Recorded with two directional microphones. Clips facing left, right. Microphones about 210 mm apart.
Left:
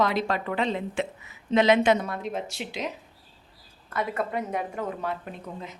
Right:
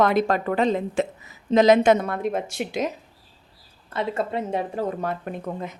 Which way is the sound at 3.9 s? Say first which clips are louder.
Right 3 dB; 25° right (ahead or behind).